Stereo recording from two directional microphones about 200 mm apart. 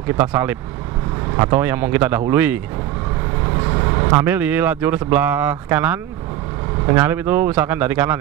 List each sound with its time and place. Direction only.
0.2 s speech: 10° right (ahead or behind)
1.3 s speech: 25° right (ahead or behind)
1.6 s speech: 10° right (ahead or behind)
3.4 s vehicle: 20° right (ahead or behind)
4.3 s speech: 10° right (ahead or behind)